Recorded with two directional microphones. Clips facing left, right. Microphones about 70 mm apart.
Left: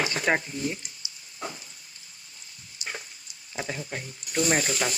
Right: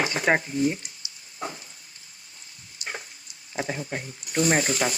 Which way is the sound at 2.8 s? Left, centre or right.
Centre.